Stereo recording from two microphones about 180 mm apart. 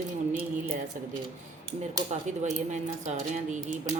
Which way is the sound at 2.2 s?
40° right (ahead or behind).